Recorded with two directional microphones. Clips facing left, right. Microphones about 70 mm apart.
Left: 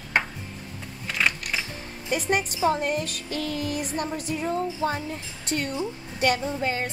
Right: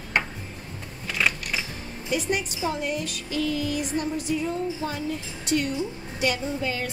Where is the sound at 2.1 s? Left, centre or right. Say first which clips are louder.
Left 1 dB; left.